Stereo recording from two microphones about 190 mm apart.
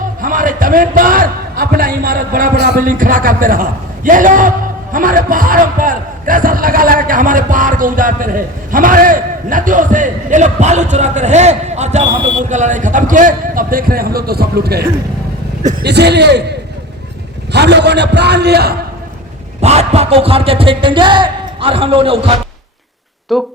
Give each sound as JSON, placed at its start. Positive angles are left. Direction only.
{"t": 0.2, "sound": "a man's voice", "side_deg": -45}
{"t": 19.6, "sound": "speech", "side_deg": -35}
{"t": 23.3, "sound": "speech", "side_deg": 0}